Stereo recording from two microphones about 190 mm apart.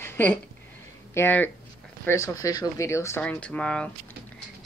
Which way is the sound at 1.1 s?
10° left (ahead or behind).